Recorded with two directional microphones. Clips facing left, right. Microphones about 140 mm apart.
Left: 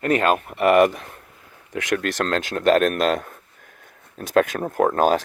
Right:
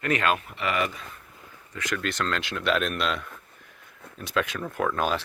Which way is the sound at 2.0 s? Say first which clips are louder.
Left 5 dB; 55° left (ahead or behind).